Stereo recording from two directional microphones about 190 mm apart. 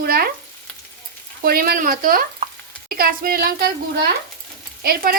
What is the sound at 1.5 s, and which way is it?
Speech, 50° right (ahead or behind).